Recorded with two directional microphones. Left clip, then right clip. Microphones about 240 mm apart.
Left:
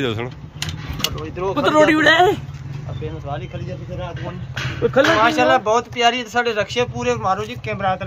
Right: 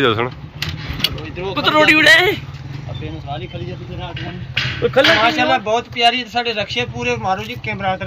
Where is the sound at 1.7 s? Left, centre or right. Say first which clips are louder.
Right 3 dB; left.